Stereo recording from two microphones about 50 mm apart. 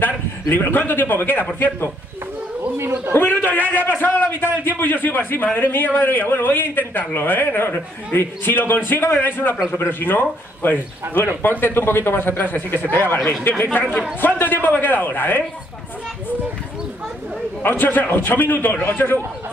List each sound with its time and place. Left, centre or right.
0.0 s a man's voice: left
3.1 s a man's voice: left
9.2 s a man's voice: left
17.6 s a man's voice: left